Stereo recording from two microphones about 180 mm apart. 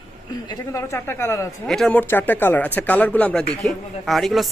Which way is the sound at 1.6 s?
Centre (ahead or behind).